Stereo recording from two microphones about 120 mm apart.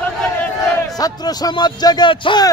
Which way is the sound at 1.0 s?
35° left (ahead or behind).